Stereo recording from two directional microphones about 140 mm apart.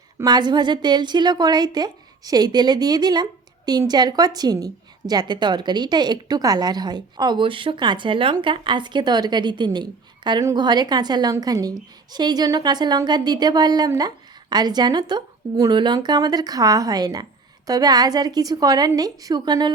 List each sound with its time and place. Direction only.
0.3 s a woman's voice: 30° right (ahead or behind)